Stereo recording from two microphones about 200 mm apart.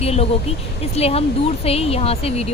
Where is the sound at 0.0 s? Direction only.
30° left (ahead or behind).